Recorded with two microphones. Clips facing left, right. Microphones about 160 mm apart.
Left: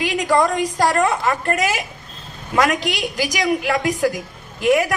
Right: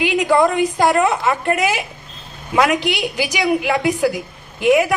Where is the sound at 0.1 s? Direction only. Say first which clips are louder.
Right 1 dB; 5° right (ahead or behind).